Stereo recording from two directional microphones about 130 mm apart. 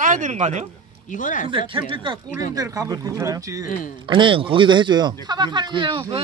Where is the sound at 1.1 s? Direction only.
80° left.